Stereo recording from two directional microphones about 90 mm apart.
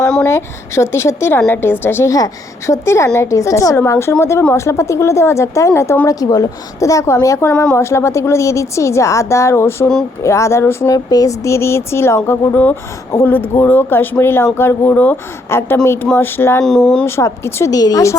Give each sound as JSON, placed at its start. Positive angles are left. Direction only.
{"t": 0.3, "sound": "speech", "side_deg": 30}
{"t": 2.0, "sound": "speech", "side_deg": 40}
{"t": 3.8, "sound": "speech", "side_deg": 30}
{"t": 7.5, "sound": "speech", "side_deg": 10}
{"t": 7.8, "sound": "speech", "side_deg": 30}
{"t": 10.9, "sound": "speech", "side_deg": 45}
{"t": 16.6, "sound": "speech", "side_deg": 5}
{"t": 17.1, "sound": "speech", "side_deg": 30}